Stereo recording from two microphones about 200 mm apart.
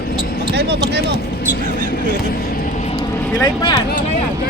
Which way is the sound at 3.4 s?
20° left (ahead or behind).